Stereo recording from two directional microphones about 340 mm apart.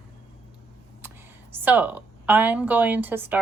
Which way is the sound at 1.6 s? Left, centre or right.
Centre.